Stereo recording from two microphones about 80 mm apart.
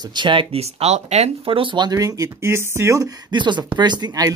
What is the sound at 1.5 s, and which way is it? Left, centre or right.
Speech, right.